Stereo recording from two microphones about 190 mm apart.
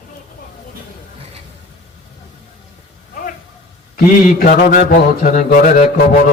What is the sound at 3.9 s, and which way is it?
Speech, 50° left (ahead or behind).